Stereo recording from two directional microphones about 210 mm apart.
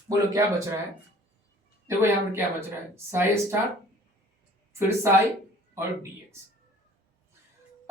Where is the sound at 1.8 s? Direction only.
10° right (ahead or behind).